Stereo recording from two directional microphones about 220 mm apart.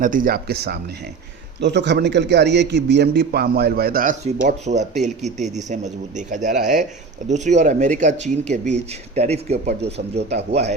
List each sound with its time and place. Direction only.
0.0 s a man's voice: 40° right (ahead or behind)